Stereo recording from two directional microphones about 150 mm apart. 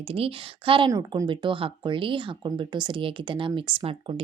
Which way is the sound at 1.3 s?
35° right (ahead or behind).